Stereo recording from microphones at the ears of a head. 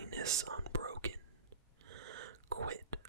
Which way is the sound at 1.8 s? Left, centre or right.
Right.